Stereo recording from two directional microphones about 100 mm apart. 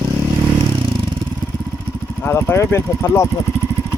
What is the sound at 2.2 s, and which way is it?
Speech, 20° left (ahead or behind).